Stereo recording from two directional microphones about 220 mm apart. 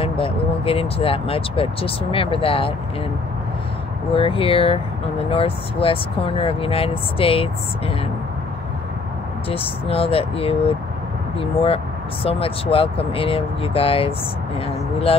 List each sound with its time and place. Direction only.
0.0 s speech: 25° left (ahead or behind)
4.1 s speech: 25° left (ahead or behind)
9.5 s speech: 25° left (ahead or behind)